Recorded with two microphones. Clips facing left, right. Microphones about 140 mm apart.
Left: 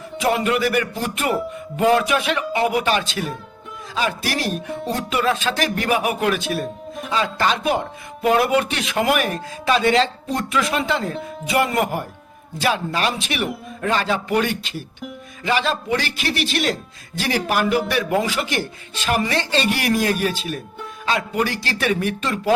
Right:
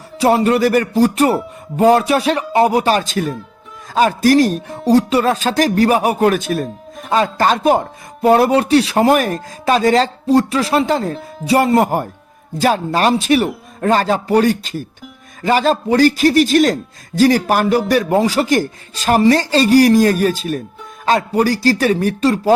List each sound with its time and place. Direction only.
0.2 s speech: 35° right (ahead or behind)